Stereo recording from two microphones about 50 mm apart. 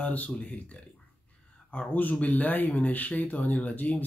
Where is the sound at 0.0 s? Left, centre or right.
Left.